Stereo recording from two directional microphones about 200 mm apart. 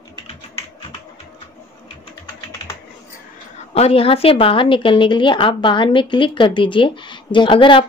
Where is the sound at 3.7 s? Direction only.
30° left (ahead or behind).